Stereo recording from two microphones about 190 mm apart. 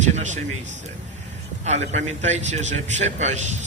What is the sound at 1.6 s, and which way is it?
A man's voice, 35° right (ahead or behind).